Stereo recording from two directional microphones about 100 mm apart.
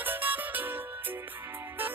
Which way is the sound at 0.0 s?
20° right (ahead or behind).